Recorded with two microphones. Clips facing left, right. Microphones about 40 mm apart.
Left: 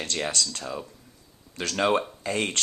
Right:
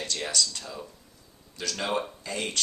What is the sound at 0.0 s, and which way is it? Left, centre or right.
Speech, left.